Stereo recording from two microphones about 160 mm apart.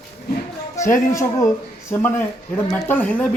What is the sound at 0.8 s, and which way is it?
Speech, 20° left (ahead or behind).